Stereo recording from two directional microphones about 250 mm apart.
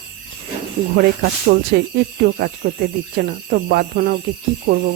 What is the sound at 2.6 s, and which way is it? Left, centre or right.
Speech, right.